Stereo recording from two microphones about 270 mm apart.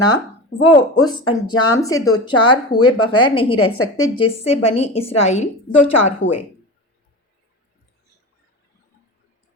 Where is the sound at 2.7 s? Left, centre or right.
Left.